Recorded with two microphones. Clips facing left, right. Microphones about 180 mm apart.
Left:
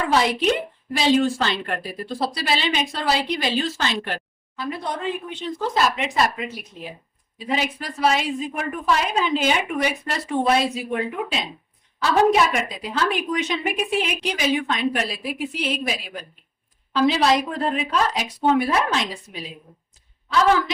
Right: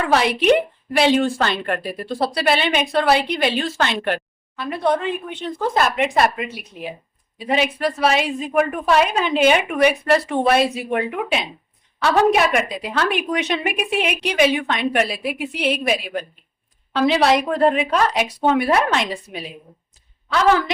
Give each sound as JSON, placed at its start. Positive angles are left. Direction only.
{"t": 0.0, "sound": "a woman's voice", "side_deg": -65}